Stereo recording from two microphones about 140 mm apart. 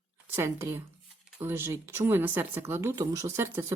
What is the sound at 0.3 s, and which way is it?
Speech, 15° right (ahead or behind).